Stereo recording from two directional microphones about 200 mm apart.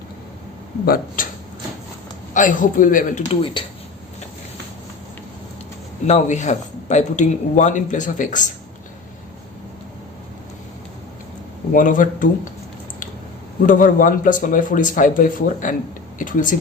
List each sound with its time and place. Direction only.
0.9 s speech: 45° left (ahead or behind)
2.3 s speech: 40° left (ahead or behind)
6.1 s speech: 35° left (ahead or behind)
11.7 s speech: 40° left (ahead or behind)
13.7 s speech: 40° left (ahead or behind)